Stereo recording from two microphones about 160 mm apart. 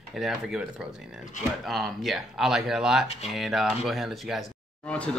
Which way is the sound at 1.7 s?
Centre (ahead or behind).